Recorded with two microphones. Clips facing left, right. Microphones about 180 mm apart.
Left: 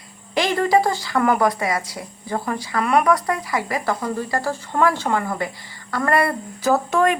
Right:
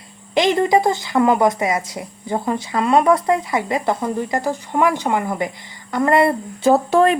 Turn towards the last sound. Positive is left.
turn(degrees=-30)  # may be behind; listen again after turning